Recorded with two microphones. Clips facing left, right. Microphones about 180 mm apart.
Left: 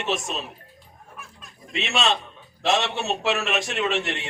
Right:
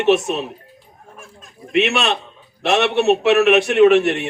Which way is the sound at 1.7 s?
65° right (ahead or behind).